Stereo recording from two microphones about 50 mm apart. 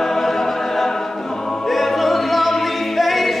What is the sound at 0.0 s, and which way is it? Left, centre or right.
Choir, centre.